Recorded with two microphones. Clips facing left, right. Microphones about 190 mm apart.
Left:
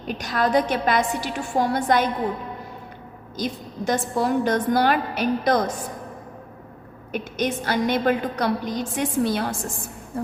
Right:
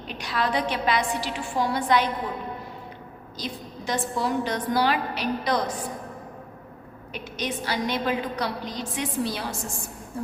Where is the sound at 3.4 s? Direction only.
50° left (ahead or behind).